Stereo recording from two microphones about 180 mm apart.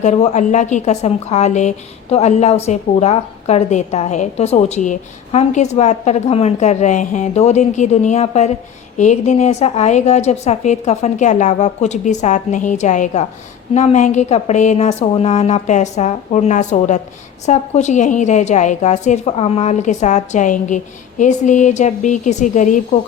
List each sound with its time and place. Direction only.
0.0 s a woman's voice: 40° left (ahead or behind)